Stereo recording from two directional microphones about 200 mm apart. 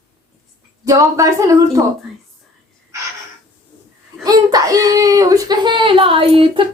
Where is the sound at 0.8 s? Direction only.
15° right (ahead or behind).